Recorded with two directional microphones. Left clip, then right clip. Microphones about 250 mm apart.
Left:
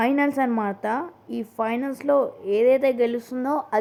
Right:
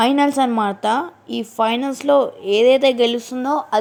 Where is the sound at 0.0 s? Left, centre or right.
Right.